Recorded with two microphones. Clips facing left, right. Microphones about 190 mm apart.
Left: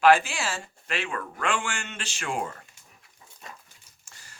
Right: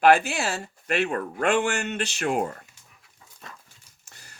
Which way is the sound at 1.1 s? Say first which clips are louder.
Right 6 dB; 40° right (ahead or behind).